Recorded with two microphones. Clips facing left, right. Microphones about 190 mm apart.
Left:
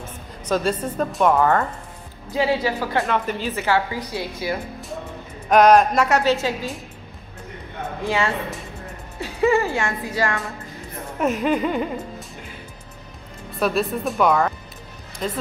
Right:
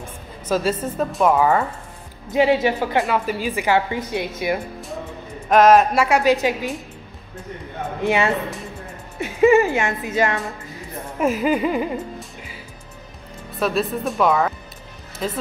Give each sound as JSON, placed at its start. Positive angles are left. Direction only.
{"t": 0.5, "sound": "a woman's voice", "side_deg": -5}
{"t": 2.3, "sound": "a woman's voice", "side_deg": -20}
{"t": 3.1, "sound": "a woman's voice", "side_deg": -10}
{"t": 5.5, "sound": "a woman's voice", "side_deg": 0}
{"t": 9.2, "sound": "a woman's voice", "side_deg": -15}
{"t": 11.1, "sound": "a woman's voice", "side_deg": -5}
{"t": 13.6, "sound": "speech", "side_deg": 0}